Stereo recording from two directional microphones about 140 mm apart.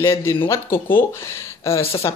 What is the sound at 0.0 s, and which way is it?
Speech, 20° left (ahead or behind).